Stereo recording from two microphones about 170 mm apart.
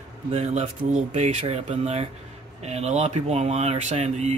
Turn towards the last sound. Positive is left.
turn(degrees=-40)  # may be behind; listen again after turning